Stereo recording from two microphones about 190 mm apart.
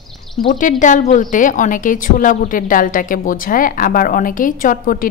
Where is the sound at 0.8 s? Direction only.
40° left (ahead or behind).